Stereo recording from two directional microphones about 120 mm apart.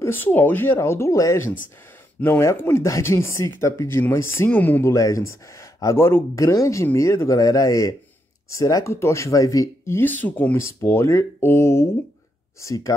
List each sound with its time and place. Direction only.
0.0 s speech: 15° left (ahead or behind)
4.9 s speech: 25° left (ahead or behind)